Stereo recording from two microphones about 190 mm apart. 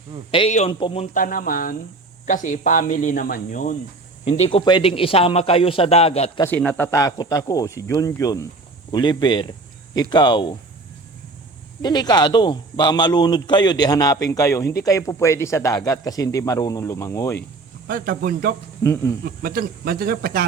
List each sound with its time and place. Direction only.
0.3 s a man's voice: 30° left (ahead or behind)
1.1 s speech: 45° left (ahead or behind)
4.3 s a man's voice: 30° left (ahead or behind)
6.6 s speech: 10° left (ahead or behind)
11.8 s a man's voice: 20° left (ahead or behind)
17.8 s speech: 50° right (ahead or behind)
18.8 s speech: 15° left (ahead or behind)
19.2 s speech: 50° right (ahead or behind)